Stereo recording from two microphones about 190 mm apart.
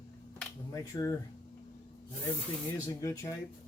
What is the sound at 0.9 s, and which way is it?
Speech, 20° left (ahead or behind).